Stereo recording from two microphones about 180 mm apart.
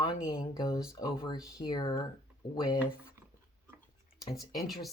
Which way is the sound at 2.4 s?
60° left (ahead or behind).